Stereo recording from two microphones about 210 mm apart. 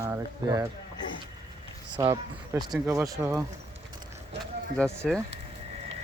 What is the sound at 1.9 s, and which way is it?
Speech, 15° right (ahead or behind).